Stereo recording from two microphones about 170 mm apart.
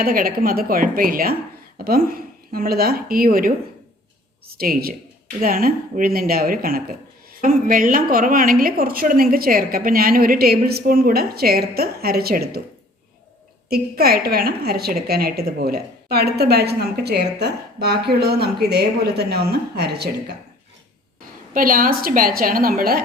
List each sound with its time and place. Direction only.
0.0 s a woman's voice: 60° right (ahead or behind)
13.7 s a woman's voice: 65° right (ahead or behind)
21.5 s a woman's voice: 55° right (ahead or behind)